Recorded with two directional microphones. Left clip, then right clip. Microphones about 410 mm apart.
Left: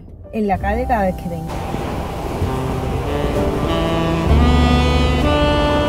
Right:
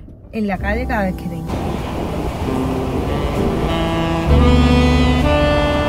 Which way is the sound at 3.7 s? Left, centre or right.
Centre.